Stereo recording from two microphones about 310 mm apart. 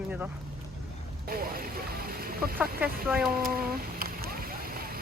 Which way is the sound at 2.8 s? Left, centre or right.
Centre.